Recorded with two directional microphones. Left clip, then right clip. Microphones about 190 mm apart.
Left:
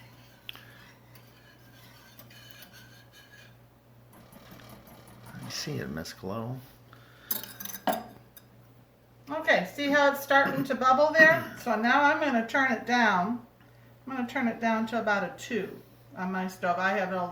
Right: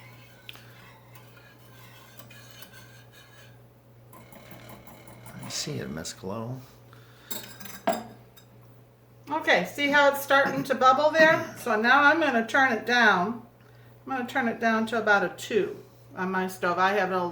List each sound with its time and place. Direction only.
5.5 s speech: centre (ahead or behind)
9.2 s a woman's voice: 25° right (ahead or behind); by 17.2 s 40° right (ahead or behind)